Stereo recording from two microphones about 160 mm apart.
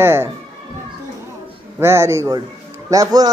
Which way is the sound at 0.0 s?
15° right (ahead or behind).